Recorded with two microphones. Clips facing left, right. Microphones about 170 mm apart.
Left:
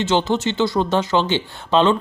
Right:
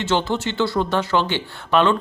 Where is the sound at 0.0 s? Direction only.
20° left (ahead or behind).